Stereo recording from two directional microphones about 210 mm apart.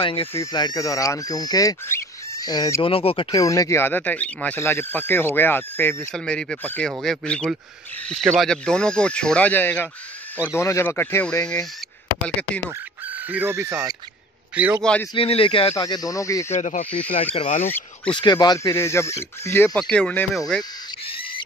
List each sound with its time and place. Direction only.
0.0 s speech: 25° left (ahead or behind); by 11.6 s 5° left (ahead or behind)
12.6 s a man's voice: 10° right (ahead or behind)
14.8 s speech: 5° left (ahead or behind)
15.1 s speech: 25° left (ahead or behind)
16.5 s speech: 35° left (ahead or behind)
17.6 s speech: 10° left (ahead or behind)
18.1 s speech: 20° left (ahead or behind); by 20.6 s 5° left (ahead or behind)
21.0 s bird: 25° left (ahead or behind)